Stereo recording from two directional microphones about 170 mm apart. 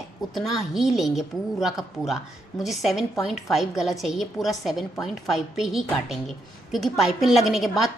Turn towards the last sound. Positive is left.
turn(degrees=0)  # may be behind; listen again after turning